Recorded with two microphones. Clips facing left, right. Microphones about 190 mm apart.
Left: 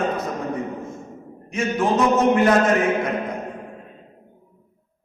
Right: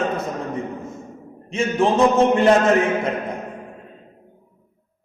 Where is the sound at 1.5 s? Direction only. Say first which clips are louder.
Right 2 dB; 25° right (ahead or behind).